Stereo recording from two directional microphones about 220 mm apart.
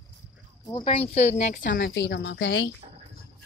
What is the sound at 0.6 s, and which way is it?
Speech, 20° left (ahead or behind).